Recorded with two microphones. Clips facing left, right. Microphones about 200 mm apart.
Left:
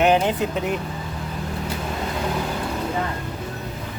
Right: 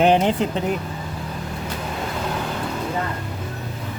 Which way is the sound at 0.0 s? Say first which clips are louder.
Right 1 dB; 30° right (ahead or behind).